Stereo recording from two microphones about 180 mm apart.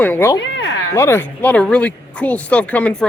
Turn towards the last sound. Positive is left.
turn(degrees=5)  # may be behind; listen again after turning